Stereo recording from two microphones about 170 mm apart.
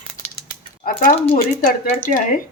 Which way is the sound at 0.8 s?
55° left (ahead or behind).